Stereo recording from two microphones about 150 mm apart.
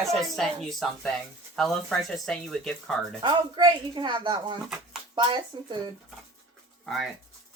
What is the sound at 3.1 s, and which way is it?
Speech, 30° right (ahead or behind).